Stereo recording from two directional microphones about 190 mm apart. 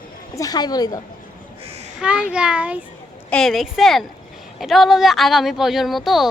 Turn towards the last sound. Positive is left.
turn(degrees=0)  # may be behind; listen again after turning